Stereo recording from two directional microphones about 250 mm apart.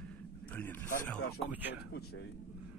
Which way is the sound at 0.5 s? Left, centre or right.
Centre.